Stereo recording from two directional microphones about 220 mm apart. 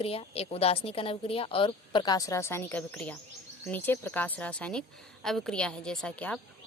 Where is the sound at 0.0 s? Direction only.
25° left (ahead or behind).